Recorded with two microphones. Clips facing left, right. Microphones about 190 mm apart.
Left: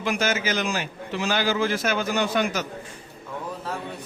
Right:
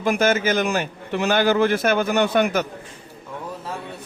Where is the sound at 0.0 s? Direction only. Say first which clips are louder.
Right 6 dB; 50° right (ahead or behind).